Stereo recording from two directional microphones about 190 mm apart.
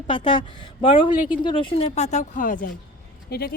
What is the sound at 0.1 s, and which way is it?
A woman's voice, 25° left (ahead or behind).